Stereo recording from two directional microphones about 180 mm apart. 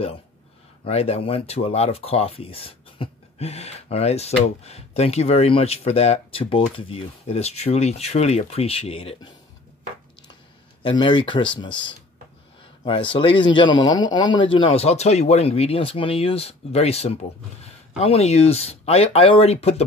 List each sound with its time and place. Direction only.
0.8 s speech: 35° left (ahead or behind)
10.8 s speech: 25° left (ahead or behind)